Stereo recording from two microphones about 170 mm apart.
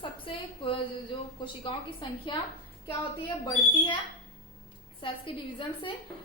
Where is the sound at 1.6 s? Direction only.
30° left (ahead or behind).